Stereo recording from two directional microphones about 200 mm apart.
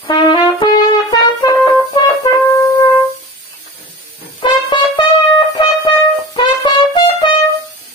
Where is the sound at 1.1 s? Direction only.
20° left (ahead or behind).